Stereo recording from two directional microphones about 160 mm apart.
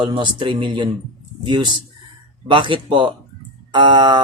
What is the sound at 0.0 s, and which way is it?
Speech, 30° right (ahead or behind).